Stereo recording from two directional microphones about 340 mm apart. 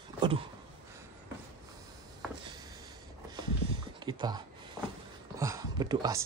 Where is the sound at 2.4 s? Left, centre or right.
Centre.